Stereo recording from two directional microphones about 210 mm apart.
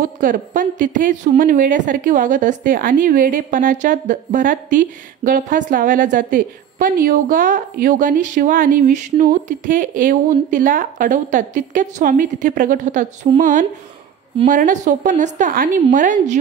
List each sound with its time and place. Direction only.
0.0 s a woman's voice: 40° right (ahead or behind)